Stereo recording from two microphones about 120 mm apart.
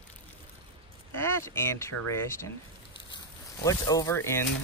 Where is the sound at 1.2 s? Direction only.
20° left (ahead or behind).